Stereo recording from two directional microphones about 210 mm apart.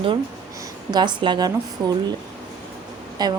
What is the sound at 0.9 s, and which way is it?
Speech, 20° right (ahead or behind).